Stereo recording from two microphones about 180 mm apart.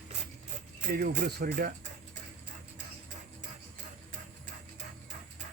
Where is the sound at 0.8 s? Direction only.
55° right (ahead or behind).